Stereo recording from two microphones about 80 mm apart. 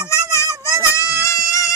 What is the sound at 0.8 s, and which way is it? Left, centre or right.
Goat, left.